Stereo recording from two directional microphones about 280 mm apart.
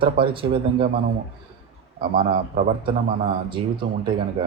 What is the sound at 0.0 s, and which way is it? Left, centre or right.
Speech, centre.